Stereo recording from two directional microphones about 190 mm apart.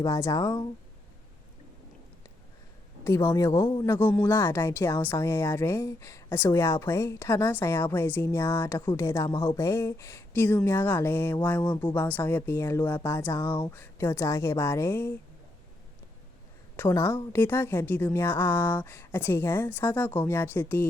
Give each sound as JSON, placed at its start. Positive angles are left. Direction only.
{"t": 0.0, "sound": "speech", "side_deg": 20}
{"t": 3.0, "sound": "speech", "side_deg": 15}
{"t": 3.9, "sound": "speech", "side_deg": 10}
{"t": 16.7, "sound": "speech", "side_deg": 15}